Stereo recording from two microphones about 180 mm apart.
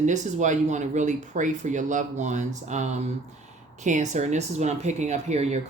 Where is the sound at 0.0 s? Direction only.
40° right (ahead or behind).